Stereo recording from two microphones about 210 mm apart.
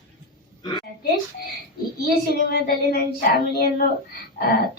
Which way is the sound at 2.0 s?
50° left (ahead or behind).